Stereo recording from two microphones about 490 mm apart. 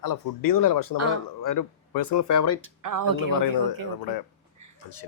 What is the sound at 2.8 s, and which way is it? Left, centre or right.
Speech, right.